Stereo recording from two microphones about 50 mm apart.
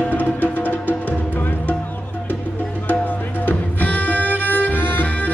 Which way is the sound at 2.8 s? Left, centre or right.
Left.